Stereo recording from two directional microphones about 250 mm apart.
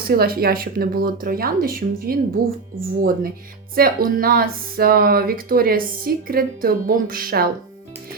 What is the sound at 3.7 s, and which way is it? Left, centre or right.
Speech, right.